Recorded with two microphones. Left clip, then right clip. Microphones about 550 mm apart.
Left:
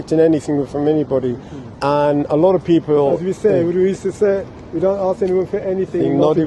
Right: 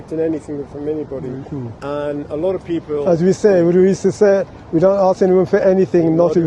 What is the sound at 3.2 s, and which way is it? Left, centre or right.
A man's voice, right.